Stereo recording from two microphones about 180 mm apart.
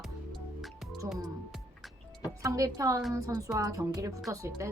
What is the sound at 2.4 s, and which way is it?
Speech, 20° right (ahead or behind).